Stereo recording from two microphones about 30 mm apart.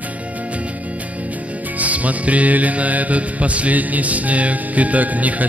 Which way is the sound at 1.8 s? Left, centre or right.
Right.